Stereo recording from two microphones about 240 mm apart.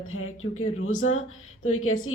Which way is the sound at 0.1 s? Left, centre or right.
Left.